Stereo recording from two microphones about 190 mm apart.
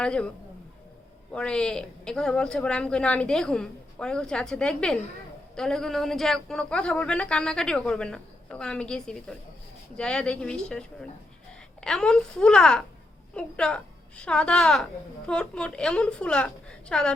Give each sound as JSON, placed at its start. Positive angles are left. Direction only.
{"t": 0.0, "sound": "a man's voice", "side_deg": 5}
{"t": 1.3, "sound": "a man's voice", "side_deg": 5}